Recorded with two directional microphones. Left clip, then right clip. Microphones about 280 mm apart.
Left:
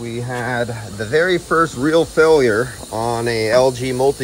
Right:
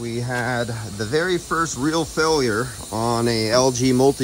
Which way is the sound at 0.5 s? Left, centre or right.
Centre.